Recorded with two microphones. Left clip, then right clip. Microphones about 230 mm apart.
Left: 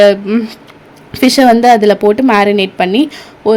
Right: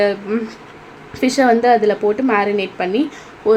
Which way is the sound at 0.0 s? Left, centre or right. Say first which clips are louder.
Left 9 dB; left.